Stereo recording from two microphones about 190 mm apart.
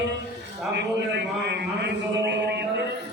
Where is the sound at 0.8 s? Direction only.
65° right (ahead or behind).